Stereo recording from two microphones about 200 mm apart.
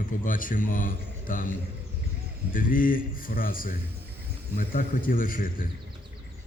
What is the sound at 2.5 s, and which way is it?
A man's voice, 45° left (ahead or behind).